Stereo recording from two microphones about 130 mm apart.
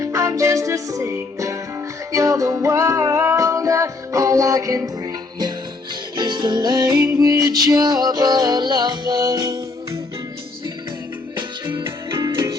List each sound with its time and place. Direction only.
0.0 s music: 25° right (ahead or behind)
6.1 s music: 35° right (ahead or behind)
11.3 s music: 35° right (ahead or behind)
11.8 s music: 20° right (ahead or behind)